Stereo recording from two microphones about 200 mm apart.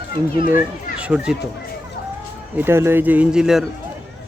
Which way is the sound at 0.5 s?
5° right (ahead or behind).